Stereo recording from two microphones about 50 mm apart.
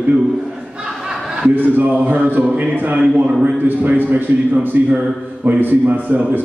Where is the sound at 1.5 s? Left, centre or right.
Right.